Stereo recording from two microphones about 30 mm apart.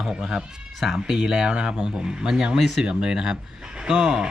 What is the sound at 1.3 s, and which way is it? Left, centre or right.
Speech, right.